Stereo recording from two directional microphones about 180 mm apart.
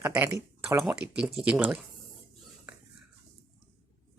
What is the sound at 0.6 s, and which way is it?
Speech, 10° right (ahead or behind).